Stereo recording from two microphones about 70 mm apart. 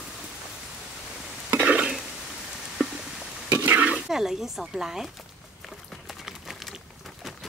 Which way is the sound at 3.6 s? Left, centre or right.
Right.